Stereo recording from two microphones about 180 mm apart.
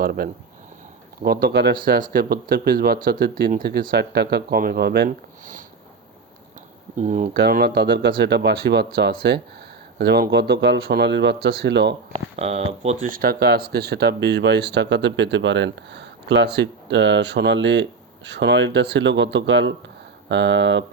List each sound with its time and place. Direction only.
0.0 s speech: 55° right (ahead or behind)
6.9 s speech: 45° right (ahead or behind)
7.3 s speech: 60° right (ahead or behind)
12.1 s speech: 35° right (ahead or behind)
13.1 s speech: 55° right (ahead or behind); by 20.8 s 80° right